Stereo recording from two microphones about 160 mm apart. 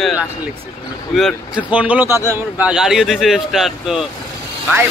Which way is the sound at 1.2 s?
5° right (ahead or behind).